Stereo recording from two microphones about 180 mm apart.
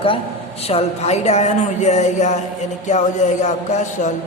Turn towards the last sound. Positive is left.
turn(degrees=40)  # may be behind; listen again after turning